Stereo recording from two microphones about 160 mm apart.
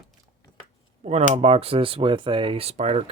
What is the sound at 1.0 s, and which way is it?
Speech, 45° right (ahead or behind).